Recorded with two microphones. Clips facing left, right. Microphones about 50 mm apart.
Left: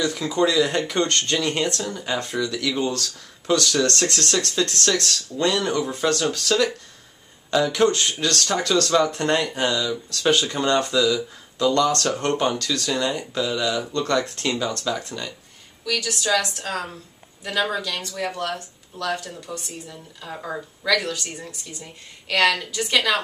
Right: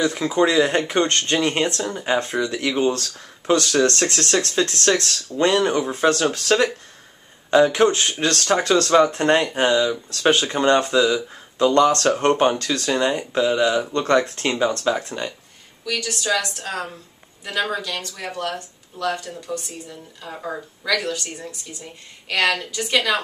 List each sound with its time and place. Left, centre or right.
0.0 s speech: right
2.7 s speech: centre
3.0 s speech: right
16.0 s speech: centre